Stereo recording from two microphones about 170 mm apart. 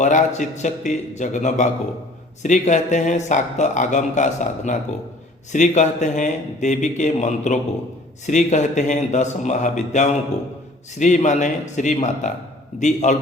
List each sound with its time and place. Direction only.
0.0 s speech: 45° left (ahead or behind)